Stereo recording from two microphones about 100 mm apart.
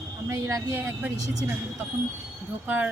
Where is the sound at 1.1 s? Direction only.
40° right (ahead or behind).